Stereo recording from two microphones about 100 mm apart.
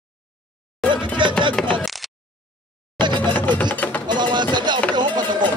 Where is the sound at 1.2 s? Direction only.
55° right (ahead or behind).